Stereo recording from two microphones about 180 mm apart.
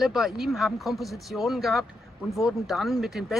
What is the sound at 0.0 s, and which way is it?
Speech, centre (ahead or behind).